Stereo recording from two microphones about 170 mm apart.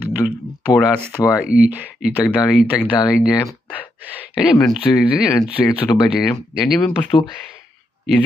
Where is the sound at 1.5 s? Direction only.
5° right (ahead or behind).